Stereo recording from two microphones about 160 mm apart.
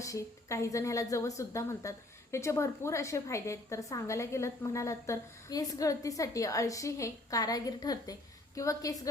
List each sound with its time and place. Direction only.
0.0 s a woman's voice: 20° left (ahead or behind)